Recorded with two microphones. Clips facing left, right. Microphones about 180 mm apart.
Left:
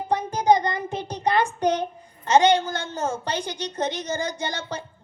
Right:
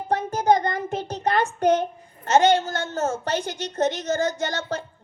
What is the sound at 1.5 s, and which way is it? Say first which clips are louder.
Speech: right 3 dB; 50° right (ahead or behind).